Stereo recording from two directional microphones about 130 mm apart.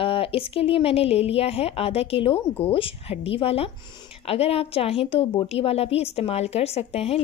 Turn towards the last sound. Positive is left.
turn(degrees=50)  # may be behind; listen again after turning